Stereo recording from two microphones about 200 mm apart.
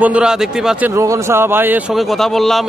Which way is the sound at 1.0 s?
15° right (ahead or behind).